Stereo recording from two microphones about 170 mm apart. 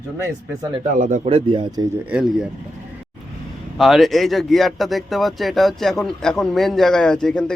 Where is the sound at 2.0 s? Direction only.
5° right (ahead or behind).